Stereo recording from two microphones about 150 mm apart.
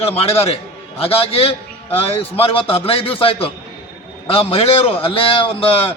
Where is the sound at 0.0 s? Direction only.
40° left (ahead or behind).